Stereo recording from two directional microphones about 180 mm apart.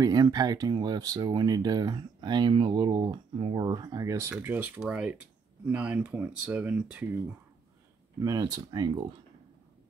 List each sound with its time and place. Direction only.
0.0 s speech: 20° right (ahead or behind)
8.2 s speech: 20° right (ahead or behind)